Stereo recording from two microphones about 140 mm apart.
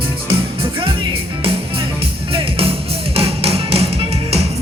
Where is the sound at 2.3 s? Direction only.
40° right (ahead or behind).